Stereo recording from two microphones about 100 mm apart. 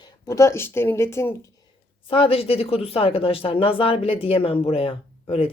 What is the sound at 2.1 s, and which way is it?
Speech, 65° left (ahead or behind).